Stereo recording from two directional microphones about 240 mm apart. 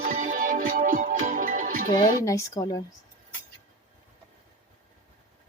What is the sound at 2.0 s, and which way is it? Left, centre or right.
Speech, centre.